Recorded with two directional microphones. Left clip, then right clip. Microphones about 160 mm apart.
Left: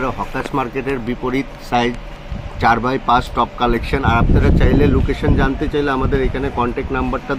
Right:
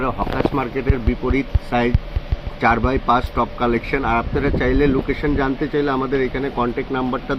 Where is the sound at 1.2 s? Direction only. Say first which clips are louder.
Left 1 dB; 20° left (ahead or behind).